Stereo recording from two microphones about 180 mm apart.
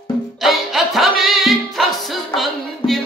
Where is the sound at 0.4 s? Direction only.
Centre (ahead or behind).